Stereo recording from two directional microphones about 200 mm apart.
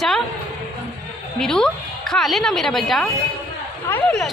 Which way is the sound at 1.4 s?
5° left (ahead or behind).